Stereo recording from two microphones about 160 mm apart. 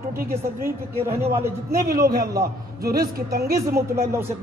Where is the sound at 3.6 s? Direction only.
15° right (ahead or behind).